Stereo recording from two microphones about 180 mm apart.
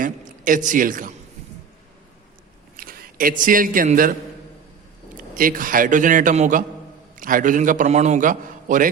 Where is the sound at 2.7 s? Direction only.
50° right (ahead or behind).